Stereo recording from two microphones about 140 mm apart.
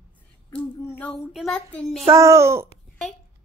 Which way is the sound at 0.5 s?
5° left (ahead or behind).